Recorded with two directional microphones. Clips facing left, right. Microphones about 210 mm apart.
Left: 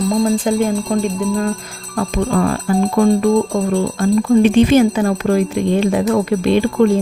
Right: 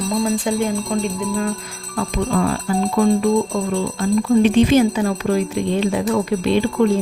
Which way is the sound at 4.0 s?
55° left (ahead or behind).